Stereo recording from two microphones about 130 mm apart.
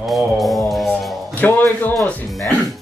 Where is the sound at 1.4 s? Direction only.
15° left (ahead or behind).